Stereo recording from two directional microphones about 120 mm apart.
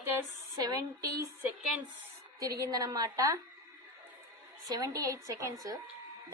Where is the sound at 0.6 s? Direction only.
30° right (ahead or behind).